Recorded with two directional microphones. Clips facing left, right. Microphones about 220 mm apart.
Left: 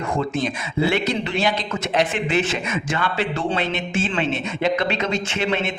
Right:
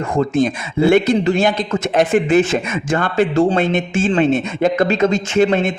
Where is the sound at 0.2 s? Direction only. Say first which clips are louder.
Right 11 dB; 45° right (ahead or behind).